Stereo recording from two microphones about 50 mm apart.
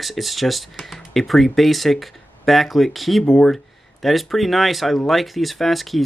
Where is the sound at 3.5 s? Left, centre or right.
Centre.